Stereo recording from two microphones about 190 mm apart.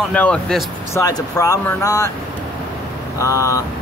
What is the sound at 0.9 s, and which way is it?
Speech, 15° left (ahead or behind).